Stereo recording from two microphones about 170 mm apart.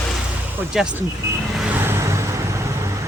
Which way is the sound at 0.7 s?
5° right (ahead or behind).